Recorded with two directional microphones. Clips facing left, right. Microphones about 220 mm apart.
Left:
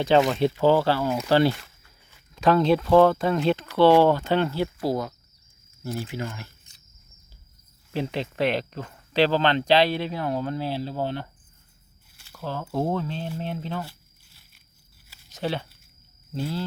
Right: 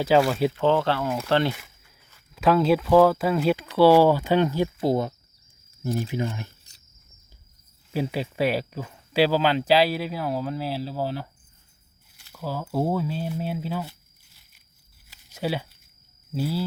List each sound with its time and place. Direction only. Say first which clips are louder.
0.0 s speech: even; 5° right (ahead or behind)
0.5 s speech: left 2 dB; 5° left (ahead or behind)
1.5 s a sound: even; 10° right (ahead or behind)
2.3 s speech: even; 5° right (ahead or behind); by 6.5 s 20° right (ahead or behind)
7.9 s speech: right 1 dB; 10° right (ahead or behind)
12.3 s speech: right 1 dB; 10° right (ahead or behind)
15.3 s speech: right 1 dB; 10° right (ahead or behind)